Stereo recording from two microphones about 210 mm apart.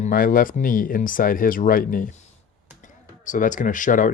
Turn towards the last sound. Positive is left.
turn(degrees=40)  # may be behind; listen again after turning